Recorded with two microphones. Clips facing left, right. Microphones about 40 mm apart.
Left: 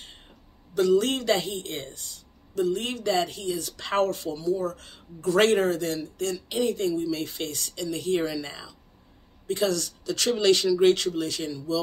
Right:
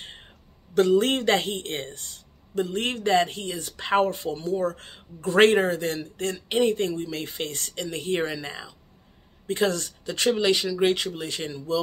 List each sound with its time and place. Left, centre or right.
0.0 s a sound: right
0.7 s a man's voice: right
10.3 s speech: centre; by 11.8 s right